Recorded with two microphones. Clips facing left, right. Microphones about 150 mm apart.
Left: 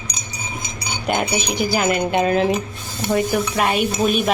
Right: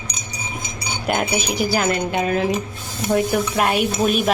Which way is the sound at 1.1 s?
5° right (ahead or behind).